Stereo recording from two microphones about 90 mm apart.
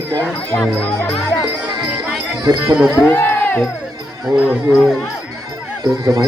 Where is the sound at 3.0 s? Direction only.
20° left (ahead or behind).